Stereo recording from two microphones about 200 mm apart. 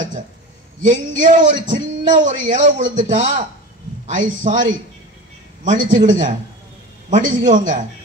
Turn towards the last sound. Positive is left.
turn(degrees=-40)  # may be behind; listen again after turning